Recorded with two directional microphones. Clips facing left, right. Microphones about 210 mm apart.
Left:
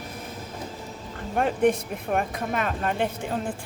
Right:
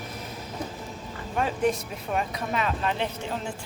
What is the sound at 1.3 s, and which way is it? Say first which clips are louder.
A woman's voice: left 4 dB; 55° left (ahead or behind).